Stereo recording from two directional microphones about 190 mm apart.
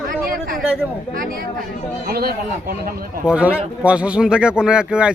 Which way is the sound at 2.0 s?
50° right (ahead or behind).